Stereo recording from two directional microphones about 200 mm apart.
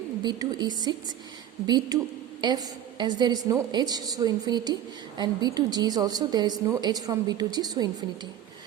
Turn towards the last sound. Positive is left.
turn(degrees=-20)  # may be behind; listen again after turning